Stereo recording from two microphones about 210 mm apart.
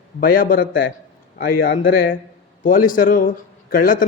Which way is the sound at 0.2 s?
45° left (ahead or behind).